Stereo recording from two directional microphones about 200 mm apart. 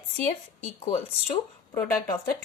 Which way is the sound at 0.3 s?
30° left (ahead or behind).